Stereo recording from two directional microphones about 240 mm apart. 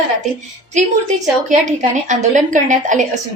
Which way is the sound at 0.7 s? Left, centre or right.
Right.